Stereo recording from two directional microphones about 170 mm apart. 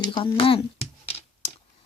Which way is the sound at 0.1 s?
30° left (ahead or behind).